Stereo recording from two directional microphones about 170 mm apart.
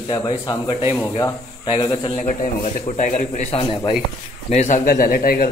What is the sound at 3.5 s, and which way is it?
Speech, 35° left (ahead or behind).